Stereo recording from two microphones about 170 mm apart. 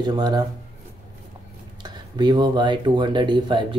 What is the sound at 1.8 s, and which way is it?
Speech, 25° right (ahead or behind).